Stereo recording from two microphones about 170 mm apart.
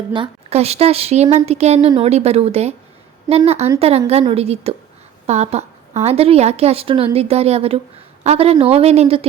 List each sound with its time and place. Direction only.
0.1 s a woman's voice: 35° right (ahead or behind)